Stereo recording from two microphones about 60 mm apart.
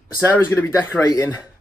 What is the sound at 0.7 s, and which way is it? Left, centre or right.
Speech, left.